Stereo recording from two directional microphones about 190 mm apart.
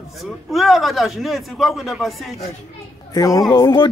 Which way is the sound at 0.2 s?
Centre (ahead or behind).